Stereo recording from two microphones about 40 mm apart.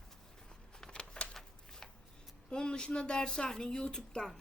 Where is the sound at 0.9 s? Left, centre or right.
Left.